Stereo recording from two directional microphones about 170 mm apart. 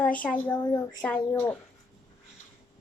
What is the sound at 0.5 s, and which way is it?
Speech, 20° left (ahead or behind).